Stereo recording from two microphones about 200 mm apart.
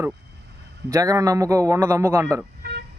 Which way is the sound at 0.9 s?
15° right (ahead or behind).